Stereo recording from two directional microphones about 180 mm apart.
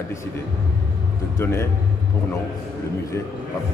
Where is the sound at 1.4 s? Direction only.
15° left (ahead or behind).